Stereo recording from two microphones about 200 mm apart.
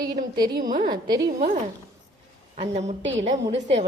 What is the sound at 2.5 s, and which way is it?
A woman's voice, 35° right (ahead or behind).